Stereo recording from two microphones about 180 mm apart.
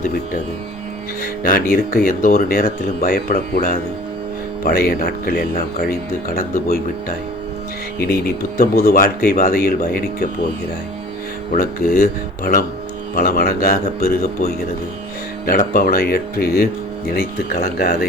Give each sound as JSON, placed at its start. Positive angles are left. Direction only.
{"t": 1.2, "sound": "speech", "side_deg": 50}
{"t": 7.9, "sound": "speech", "side_deg": 60}
{"t": 11.5, "sound": "speech", "side_deg": 50}